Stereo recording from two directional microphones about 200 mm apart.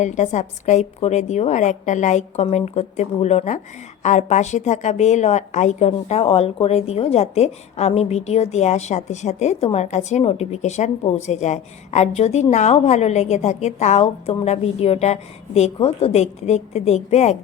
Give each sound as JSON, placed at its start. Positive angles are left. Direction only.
{"t": 0.0, "sound": "a woman's voice", "side_deg": 35}